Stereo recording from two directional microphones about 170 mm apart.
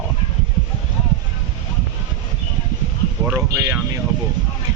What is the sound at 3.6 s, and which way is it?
Speech, 20° right (ahead or behind).